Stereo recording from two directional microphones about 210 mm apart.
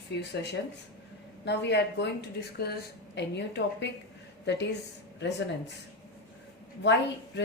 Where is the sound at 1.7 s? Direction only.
55° left (ahead or behind).